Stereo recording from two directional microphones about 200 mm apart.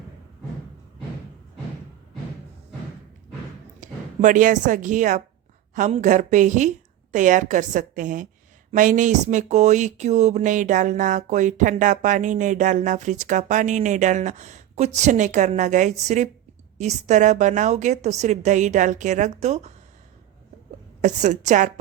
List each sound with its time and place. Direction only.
3.8 s a woman's voice: 40° right (ahead or behind)
21.0 s speech: 35° right (ahead or behind)